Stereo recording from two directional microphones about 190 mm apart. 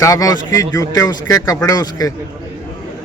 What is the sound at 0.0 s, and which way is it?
Speech, 20° left (ahead or behind).